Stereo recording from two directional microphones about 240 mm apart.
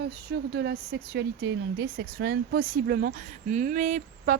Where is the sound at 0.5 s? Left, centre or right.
Right.